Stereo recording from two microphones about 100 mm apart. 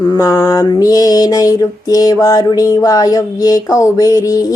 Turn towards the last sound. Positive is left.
turn(degrees=35)  # may be behind; listen again after turning